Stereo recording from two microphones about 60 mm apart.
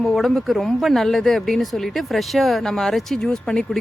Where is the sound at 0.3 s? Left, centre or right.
Centre.